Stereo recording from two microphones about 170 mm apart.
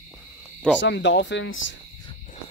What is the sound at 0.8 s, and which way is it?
Speech, 90° left.